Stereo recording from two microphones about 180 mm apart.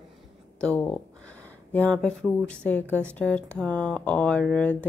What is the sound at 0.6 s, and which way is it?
Speech, 10° left (ahead or behind).